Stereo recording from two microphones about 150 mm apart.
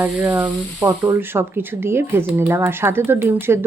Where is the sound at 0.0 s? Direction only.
15° right (ahead or behind).